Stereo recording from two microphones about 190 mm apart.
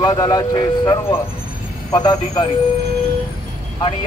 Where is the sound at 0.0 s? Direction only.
20° left (ahead or behind).